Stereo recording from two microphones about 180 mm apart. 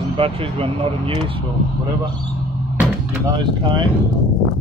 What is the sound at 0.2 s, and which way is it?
Speech, 30° right (ahead or behind).